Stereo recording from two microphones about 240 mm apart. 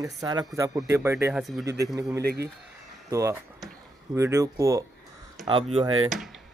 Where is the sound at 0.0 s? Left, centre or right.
Centre.